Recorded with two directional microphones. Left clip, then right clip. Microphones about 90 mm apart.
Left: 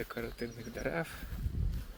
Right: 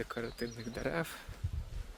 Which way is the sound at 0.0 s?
30° right (ahead or behind).